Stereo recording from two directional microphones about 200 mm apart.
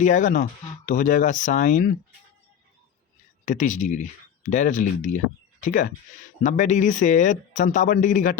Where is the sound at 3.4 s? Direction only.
40° left (ahead or behind).